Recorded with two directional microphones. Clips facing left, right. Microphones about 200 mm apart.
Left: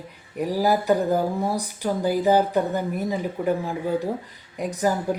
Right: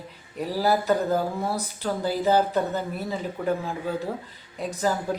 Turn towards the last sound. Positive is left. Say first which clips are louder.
# left 2 dB
turn(degrees=15)  # may be behind; listen again after turning